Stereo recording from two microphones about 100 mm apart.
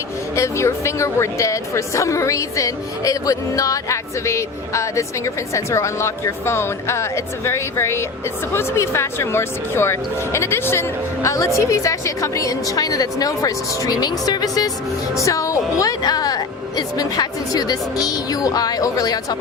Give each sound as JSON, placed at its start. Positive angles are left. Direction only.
{"t": 0.3, "sound": "a woman's voice", "side_deg": 30}